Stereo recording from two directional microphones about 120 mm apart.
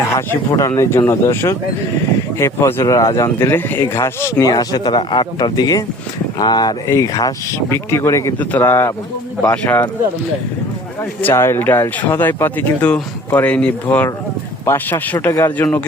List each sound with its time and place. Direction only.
0.3 s speech: 20° left (ahead or behind)
11.2 s speech: 20° left (ahead or behind)